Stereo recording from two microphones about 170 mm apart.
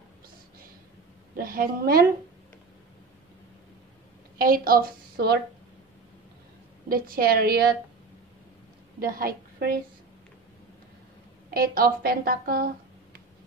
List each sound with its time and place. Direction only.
1.3 s a woman's voice: 60° right (ahead or behind)
4.4 s a woman's voice: 60° right (ahead or behind)
6.9 s a woman's voice: 60° right (ahead or behind)
9.0 s a woman's voice: 60° right (ahead or behind)
11.5 s speech: 60° right (ahead or behind)